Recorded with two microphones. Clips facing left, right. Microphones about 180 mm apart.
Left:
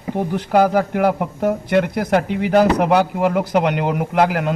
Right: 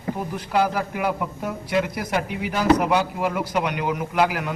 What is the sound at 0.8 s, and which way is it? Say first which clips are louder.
Speech: left 7 dB; 65° left (ahead or behind).